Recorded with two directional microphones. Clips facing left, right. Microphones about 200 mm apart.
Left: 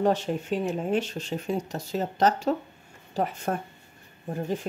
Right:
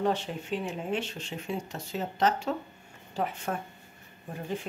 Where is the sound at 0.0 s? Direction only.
40° left (ahead or behind).